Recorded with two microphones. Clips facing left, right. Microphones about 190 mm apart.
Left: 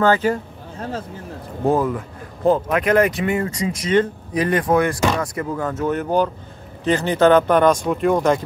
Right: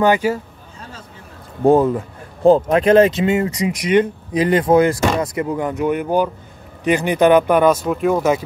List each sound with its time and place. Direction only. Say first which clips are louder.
0.0 s speech: right 1 dB; 15° right (ahead or behind)
1.7 s speech: right 6 dB; 25° right (ahead or behind); by 8.4 s 5° right (ahead or behind)